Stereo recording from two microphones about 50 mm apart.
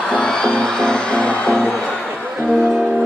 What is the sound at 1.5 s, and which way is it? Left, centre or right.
Music, centre.